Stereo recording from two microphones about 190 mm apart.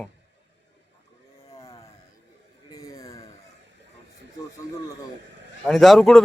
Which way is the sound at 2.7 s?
15° left (ahead or behind).